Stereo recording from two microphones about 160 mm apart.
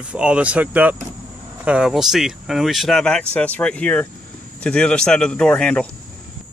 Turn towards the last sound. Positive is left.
turn(degrees=5)  # may be behind; listen again after turning